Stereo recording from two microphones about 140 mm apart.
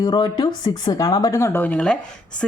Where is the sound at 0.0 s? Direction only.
30° left (ahead or behind).